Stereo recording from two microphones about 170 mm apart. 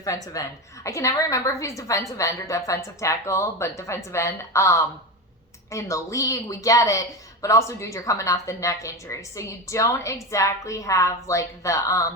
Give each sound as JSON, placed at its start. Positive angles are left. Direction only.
{"t": 0.1, "sound": "speech", "side_deg": 20}